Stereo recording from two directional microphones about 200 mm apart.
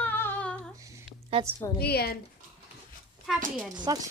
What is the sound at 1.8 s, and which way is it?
Speech, 50° left (ahead or behind).